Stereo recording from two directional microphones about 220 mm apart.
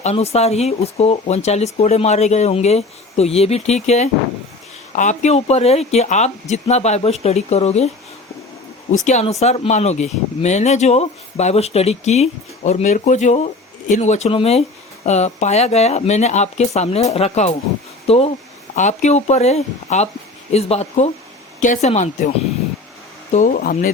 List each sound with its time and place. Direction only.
0.0 s speech: 30° left (ahead or behind)
9.0 s speech: 30° left (ahead or behind)
23.3 s speech: 35° left (ahead or behind)